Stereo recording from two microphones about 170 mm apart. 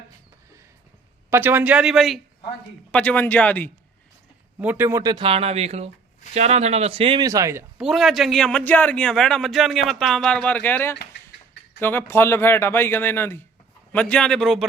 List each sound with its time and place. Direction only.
1.3 s speech: 10° right (ahead or behind); by 3.7 s 10° left (ahead or behind)
4.6 s speech: 10° right (ahead or behind); by 7.3 s 30° right (ahead or behind)
7.3 s speech: 20° right (ahead or behind)
7.8 s a man's voice: centre (ahead or behind)